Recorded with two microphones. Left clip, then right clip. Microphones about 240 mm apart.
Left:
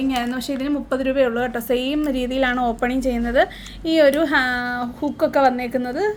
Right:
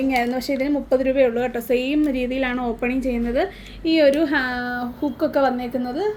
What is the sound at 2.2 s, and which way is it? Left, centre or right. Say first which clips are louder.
A woman's voice: left 3 dB; left.